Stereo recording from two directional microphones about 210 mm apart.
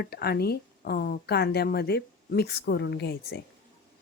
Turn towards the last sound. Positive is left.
turn(degrees=50)  # may be behind; listen again after turning